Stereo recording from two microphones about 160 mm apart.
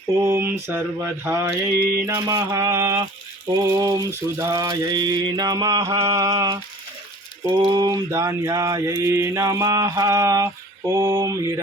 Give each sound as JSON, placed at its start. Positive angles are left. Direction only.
{"t": 0.2, "sound": "mantra", "side_deg": -15}
{"t": 7.7, "sound": "mantra", "side_deg": -25}